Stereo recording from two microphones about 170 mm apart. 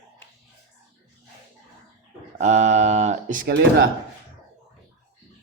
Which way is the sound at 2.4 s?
45° right (ahead or behind).